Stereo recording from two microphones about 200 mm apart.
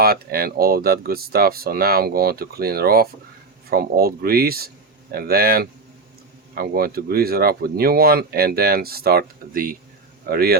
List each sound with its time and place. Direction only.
0.0 s speech: 50° right (ahead or behind)